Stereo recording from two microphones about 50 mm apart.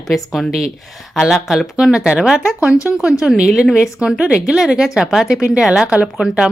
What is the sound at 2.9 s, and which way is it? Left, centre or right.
A woman's voice, right.